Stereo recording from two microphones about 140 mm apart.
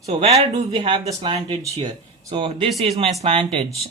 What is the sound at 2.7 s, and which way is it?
Speech, 50° right (ahead or behind).